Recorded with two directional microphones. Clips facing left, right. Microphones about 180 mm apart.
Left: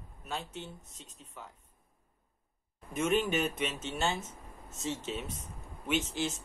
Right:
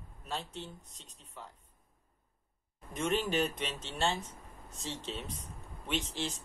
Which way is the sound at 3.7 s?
35° right (ahead or behind).